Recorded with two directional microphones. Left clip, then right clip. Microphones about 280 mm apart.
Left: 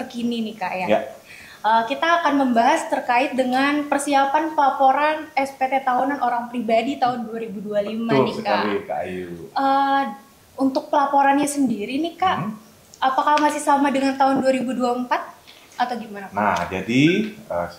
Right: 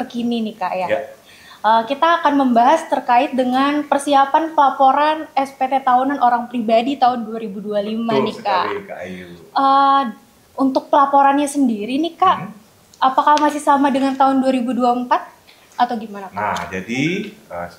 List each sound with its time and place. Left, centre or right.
0.1 s a woman's voice: right
16.8 s speech: left